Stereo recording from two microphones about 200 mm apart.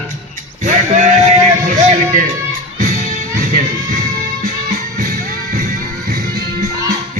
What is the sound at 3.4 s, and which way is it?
Music, 45° right (ahead or behind).